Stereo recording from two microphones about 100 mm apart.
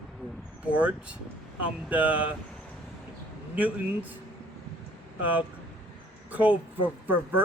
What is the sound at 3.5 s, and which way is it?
Speech, 15° right (ahead or behind).